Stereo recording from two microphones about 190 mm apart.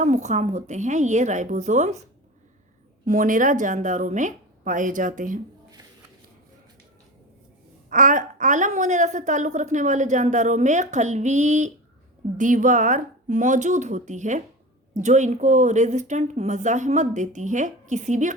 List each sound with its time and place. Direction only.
0.0 s a woman's voice: 40° right (ahead or behind)
3.1 s a woman's voice: 45° right (ahead or behind)
7.9 s a woman's voice: 45° right (ahead or behind)